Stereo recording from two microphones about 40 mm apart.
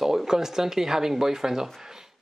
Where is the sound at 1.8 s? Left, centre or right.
Centre.